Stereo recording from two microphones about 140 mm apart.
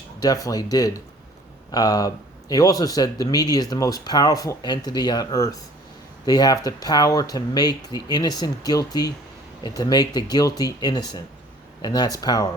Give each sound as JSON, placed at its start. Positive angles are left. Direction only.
{"t": 0.2, "sound": "speech", "side_deg": 25}